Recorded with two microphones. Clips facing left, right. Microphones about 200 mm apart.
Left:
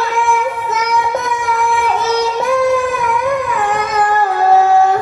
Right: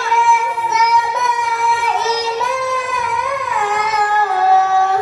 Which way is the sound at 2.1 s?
50° left (ahead or behind).